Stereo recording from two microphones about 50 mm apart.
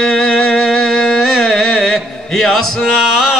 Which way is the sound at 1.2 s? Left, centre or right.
Centre.